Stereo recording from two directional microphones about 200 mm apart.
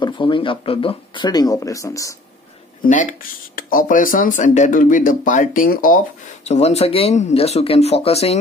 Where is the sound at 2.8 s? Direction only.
40° left (ahead or behind).